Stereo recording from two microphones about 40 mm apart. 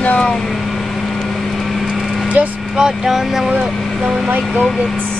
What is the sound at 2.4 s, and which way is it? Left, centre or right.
Speech, right.